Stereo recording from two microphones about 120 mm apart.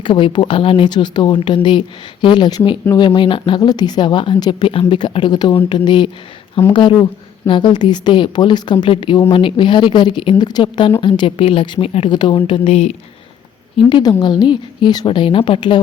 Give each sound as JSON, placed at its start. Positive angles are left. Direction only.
{"t": 0.0, "sound": "a woman's voice", "side_deg": 40}
{"t": 13.7, "sound": "a woman's voice", "side_deg": 35}